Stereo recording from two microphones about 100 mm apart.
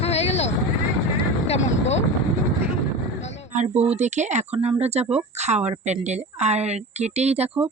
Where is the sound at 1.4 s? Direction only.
90° left.